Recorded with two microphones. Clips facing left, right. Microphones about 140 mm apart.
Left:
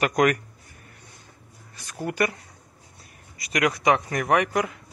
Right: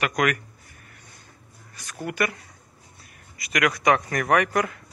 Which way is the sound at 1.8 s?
30° left (ahead or behind).